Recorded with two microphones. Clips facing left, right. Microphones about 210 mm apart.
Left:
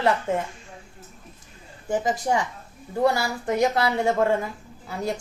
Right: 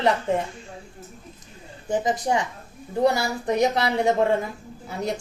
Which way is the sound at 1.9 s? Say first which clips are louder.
Right 1 dB; 20° right (ahead or behind).